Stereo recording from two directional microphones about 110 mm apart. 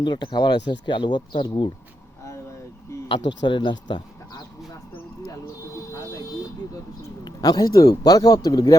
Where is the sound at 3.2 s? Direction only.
45° left (ahead or behind).